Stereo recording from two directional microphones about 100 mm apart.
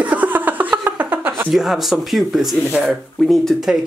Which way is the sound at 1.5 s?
Centre (ahead or behind).